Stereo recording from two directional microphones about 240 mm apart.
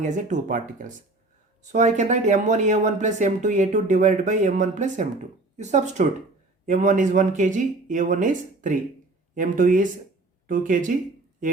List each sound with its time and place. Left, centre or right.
0.0 s speech: right